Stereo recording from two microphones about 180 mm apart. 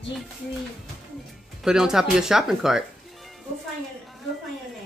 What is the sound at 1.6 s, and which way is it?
Speech, 5° right (ahead or behind).